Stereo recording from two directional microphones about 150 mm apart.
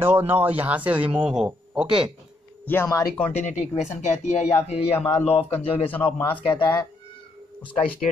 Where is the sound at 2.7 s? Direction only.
20° left (ahead or behind).